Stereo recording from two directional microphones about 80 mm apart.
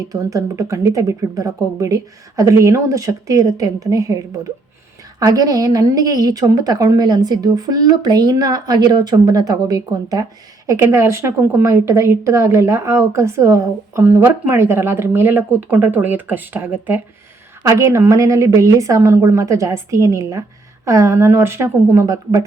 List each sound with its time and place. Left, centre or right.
0.0 s speech: right
5.2 s a woman's voice: right
10.8 s a woman's voice: right
17.6 s a woman's voice: right